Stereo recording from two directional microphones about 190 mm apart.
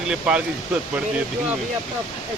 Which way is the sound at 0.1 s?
5° right (ahead or behind).